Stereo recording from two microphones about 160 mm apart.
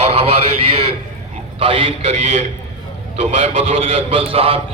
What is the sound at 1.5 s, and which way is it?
A man's voice, 35° right (ahead or behind).